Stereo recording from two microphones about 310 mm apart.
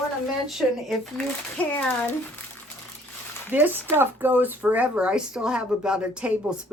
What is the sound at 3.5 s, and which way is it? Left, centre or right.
A woman's voice, centre.